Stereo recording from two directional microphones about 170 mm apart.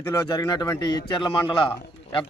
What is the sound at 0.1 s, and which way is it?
A man's voice, 20° left (ahead or behind).